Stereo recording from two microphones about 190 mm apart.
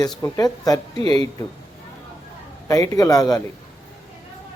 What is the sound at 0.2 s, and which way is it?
Speech, 20° left (ahead or behind).